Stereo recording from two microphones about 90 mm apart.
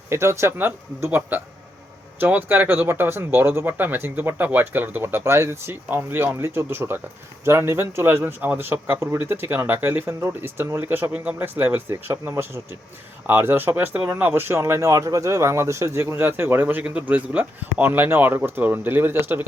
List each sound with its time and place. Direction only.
0.1 s speech: 30° right (ahead or behind)